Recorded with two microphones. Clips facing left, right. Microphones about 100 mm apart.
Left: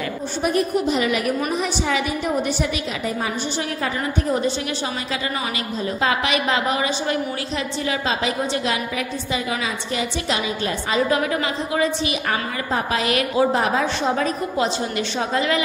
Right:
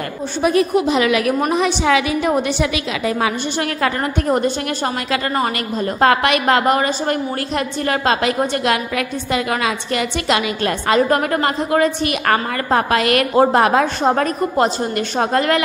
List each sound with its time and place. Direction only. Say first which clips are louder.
0.5 s a woman's voice: right 5 dB; 90° right
3.8 s a woman's voice: right 5 dB; 60° right (ahead or behind)